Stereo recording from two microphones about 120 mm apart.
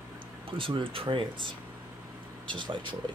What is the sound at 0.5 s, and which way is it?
Speech, 45° right (ahead or behind).